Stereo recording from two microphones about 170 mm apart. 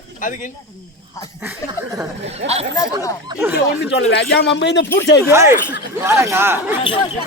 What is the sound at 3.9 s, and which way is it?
Speech, 90° left.